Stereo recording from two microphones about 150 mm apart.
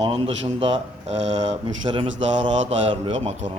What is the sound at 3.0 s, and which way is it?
Speech, 50° right (ahead or behind).